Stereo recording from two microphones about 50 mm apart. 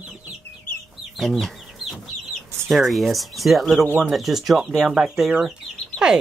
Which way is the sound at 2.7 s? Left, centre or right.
Centre.